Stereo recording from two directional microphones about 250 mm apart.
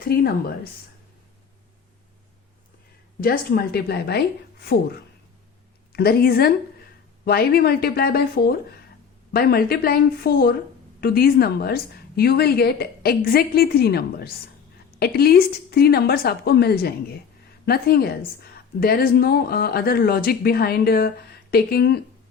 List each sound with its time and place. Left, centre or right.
0.0 s a woman's voice: left
3.2 s a woman's voice: left